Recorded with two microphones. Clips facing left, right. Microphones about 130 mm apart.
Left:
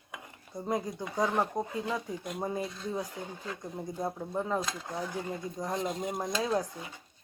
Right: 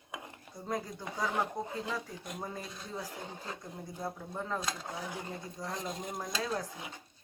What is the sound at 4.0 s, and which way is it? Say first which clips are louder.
A woman's voice: left 5 dB; 20° left (ahead or behind).